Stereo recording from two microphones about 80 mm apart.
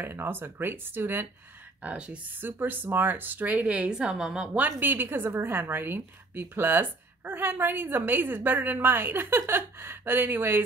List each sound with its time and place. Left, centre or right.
0.0 s speech: right
1.8 s speech: centre